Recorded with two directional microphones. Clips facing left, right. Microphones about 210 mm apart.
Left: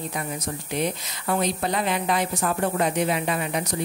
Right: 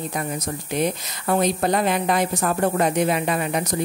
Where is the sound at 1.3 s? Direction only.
45° right (ahead or behind).